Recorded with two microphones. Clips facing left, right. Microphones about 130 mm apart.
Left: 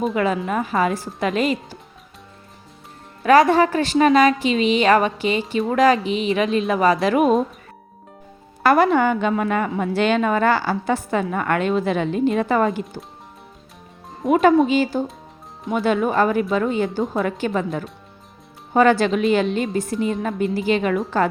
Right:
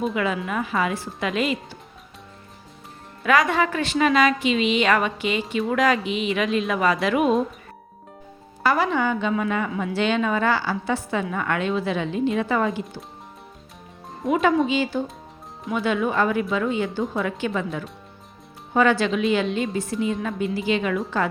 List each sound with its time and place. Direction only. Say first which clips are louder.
0.1 s a woman's voice: left 4 dB; 40° left (ahead or behind)
3.2 s a woman's voice: left 6 dB; 35° left (ahead or behind)
8.6 s a woman's voice: left 6 dB; 55° left (ahead or behind)
14.3 s a woman's voice: left 5 dB; 50° left (ahead or behind)